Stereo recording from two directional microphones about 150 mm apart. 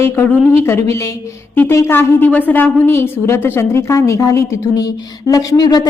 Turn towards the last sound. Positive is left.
turn(degrees=25)  # may be behind; listen again after turning